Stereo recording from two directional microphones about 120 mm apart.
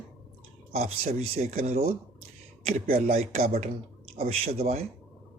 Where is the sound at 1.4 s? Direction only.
60° right (ahead or behind).